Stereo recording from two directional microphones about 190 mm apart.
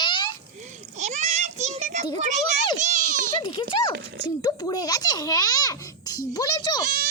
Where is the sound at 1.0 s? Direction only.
35° right (ahead or behind).